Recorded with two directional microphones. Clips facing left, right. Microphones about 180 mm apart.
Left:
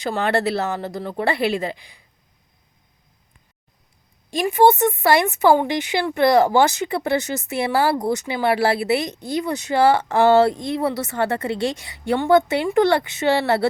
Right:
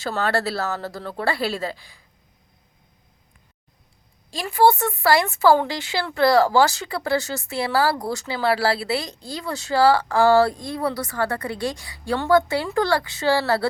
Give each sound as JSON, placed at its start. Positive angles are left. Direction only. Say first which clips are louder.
{"t": 0.0, "sound": "speech", "louder": "left 3 dB", "side_deg": 15}
{"t": 4.3, "sound": "speech", "louder": "left 3 dB", "side_deg": 20}